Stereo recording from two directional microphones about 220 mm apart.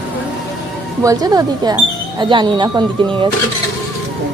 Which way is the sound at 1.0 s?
15° right (ahead or behind).